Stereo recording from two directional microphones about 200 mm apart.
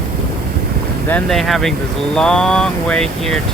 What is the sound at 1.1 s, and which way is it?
Speech, centre (ahead or behind).